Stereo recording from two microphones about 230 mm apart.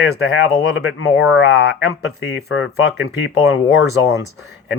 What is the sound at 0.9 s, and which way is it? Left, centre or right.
Speech, left.